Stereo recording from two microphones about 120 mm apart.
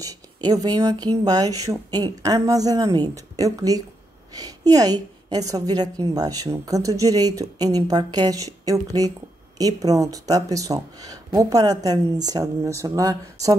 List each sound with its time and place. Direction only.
0.0 s a woman's voice: 30° right (ahead or behind)